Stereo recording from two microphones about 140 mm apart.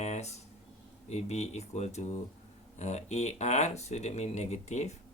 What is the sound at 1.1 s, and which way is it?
Speech, 50° left (ahead or behind).